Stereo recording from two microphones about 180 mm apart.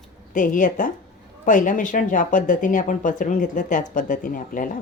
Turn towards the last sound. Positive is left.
turn(degrees=50)  # may be behind; listen again after turning